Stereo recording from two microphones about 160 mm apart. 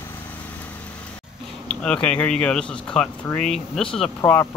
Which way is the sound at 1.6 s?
5° left (ahead or behind).